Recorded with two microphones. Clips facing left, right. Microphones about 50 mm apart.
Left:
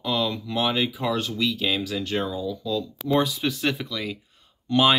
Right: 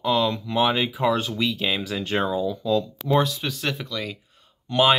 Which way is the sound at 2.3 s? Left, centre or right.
Right.